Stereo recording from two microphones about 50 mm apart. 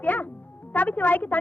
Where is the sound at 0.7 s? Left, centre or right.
Left.